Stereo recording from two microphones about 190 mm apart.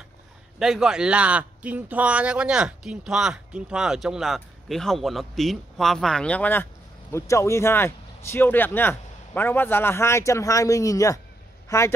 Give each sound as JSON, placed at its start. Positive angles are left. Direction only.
{"t": 0.6, "sound": "a man's voice", "side_deg": -5}